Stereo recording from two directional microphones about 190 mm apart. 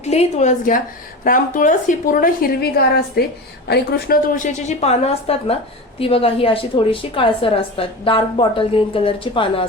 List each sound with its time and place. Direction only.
0.0 s a woman's voice: 35° left (ahead or behind)